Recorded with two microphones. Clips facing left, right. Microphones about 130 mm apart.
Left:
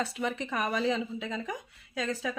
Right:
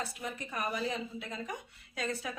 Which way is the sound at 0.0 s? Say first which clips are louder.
Left 7 dB; 90° left.